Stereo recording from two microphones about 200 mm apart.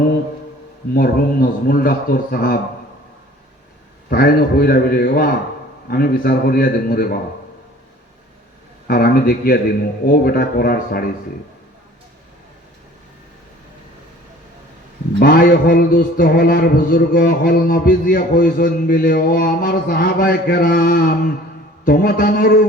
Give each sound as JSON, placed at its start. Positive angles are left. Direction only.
{"t": 0.9, "sound": "a man's voice", "side_deg": 45}
{"t": 4.1, "sound": "a man's voice", "side_deg": 50}
{"t": 8.9, "sound": "a man's voice", "side_deg": 50}
{"t": 15.2, "sound": "a man's voice", "side_deg": 45}